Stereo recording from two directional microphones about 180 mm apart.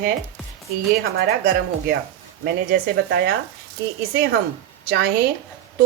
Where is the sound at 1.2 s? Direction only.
60° right (ahead or behind).